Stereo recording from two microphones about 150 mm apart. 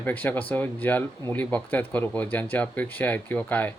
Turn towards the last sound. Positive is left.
turn(degrees=10)  # may be behind; listen again after turning